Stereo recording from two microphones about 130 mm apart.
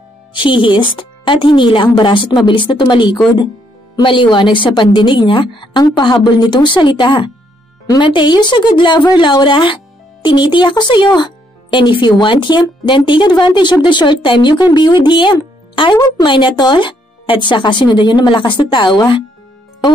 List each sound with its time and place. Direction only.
0.3 s speech: 40° left (ahead or behind)